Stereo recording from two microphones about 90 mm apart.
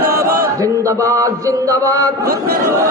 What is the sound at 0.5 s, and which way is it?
A man's voice, 35° right (ahead or behind).